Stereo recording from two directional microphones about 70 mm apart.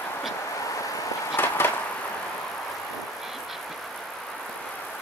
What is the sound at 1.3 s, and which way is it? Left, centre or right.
Skateboard, left.